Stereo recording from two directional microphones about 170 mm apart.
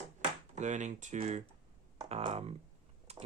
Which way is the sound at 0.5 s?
45° right (ahead or behind).